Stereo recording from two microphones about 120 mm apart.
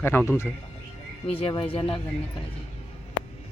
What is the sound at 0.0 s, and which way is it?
Speech, 20° left (ahead or behind).